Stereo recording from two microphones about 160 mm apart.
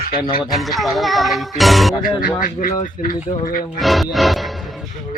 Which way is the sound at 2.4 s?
60° left (ahead or behind).